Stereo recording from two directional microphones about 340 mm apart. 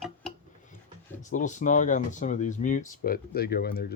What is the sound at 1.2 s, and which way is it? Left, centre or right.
Speech, left.